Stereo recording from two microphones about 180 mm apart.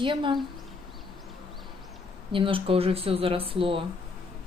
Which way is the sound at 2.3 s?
30° right (ahead or behind).